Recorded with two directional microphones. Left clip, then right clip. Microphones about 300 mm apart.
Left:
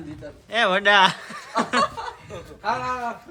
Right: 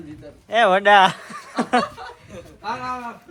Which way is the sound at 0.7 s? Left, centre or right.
Centre.